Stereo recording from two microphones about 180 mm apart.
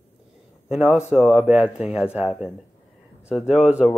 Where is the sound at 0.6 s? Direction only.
Centre (ahead or behind).